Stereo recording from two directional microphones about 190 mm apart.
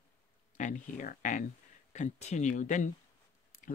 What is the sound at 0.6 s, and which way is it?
Speech, 40° left (ahead or behind).